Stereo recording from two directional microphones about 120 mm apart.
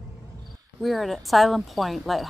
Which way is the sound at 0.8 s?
Centre (ahead or behind).